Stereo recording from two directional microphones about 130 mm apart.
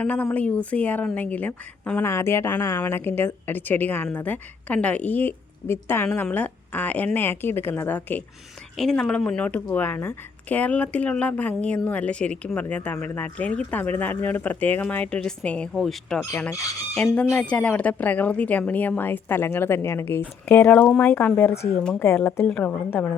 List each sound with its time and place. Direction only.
0.0 s a woman's voice: 15° left (ahead or behind)
8.7 s a woman's voice: 5° left (ahead or behind); by 21.7 s 20° left (ahead or behind)
21.8 s a woman's voice: 5° left (ahead or behind)